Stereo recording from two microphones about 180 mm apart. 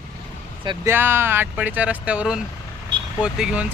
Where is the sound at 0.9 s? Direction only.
10° right (ahead or behind).